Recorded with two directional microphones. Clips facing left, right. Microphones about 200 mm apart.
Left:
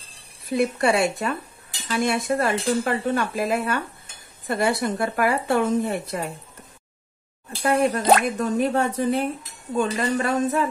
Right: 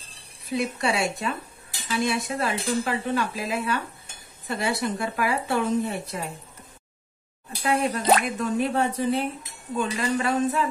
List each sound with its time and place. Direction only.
0.5 s speech: 55° left (ahead or behind)
1.9 s dishes: 50° left (ahead or behind)
7.6 s dishes: 50° left (ahead or behind)